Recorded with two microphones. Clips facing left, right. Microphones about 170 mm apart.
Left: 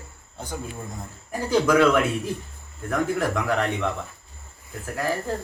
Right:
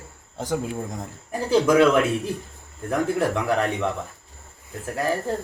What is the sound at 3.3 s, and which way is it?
Speech, 10° right (ahead or behind).